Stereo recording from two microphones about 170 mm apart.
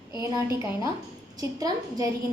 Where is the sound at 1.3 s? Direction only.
20° right (ahead or behind).